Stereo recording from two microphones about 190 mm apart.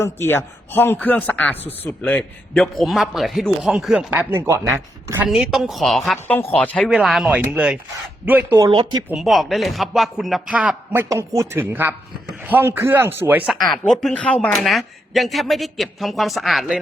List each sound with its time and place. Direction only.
0.0 s a man's voice: 10° left (ahead or behind); by 5.3 s 15° right (ahead or behind)
5.3 s a man's voice: 5° right (ahead or behind); by 9.0 s 25° right (ahead or behind)
9.0 s a man's voice: centre (ahead or behind)
13.8 s a man's voice: 5° left (ahead or behind)